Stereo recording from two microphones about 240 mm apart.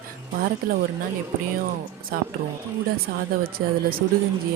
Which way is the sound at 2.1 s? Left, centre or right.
Right.